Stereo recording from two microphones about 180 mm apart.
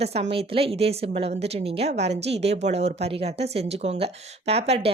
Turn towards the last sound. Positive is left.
turn(degrees=-35)  # may be behind; listen again after turning